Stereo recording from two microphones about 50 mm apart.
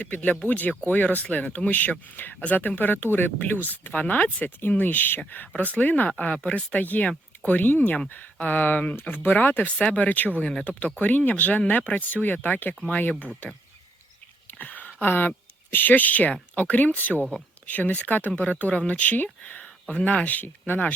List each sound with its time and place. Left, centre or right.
0.0 s speech: left
2.3 s speech: left
14.4 s a sound: left
15.0 s speech: left